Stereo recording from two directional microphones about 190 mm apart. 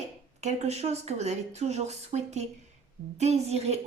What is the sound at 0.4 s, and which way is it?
Speech, 35° right (ahead or behind).